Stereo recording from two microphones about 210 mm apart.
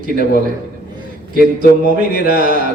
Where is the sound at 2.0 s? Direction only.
40° right (ahead or behind).